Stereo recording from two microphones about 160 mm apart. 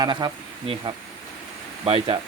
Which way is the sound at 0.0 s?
25° right (ahead or behind).